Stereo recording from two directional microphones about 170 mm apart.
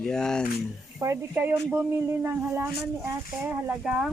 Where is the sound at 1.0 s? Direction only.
15° right (ahead or behind).